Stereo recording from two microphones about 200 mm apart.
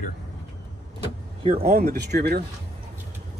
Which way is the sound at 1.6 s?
50° right (ahead or behind).